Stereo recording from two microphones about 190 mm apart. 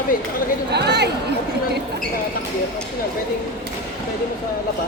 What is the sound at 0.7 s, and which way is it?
Speech, 60° right (ahead or behind).